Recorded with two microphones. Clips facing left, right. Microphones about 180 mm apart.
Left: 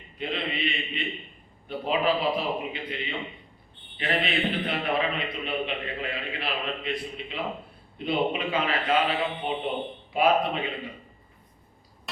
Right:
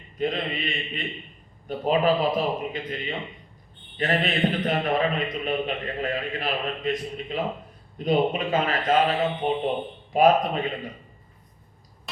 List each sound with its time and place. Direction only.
0.2 s a man's voice: 40° right (ahead or behind)